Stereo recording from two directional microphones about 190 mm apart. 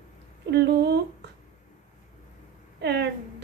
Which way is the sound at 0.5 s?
60° right (ahead or behind).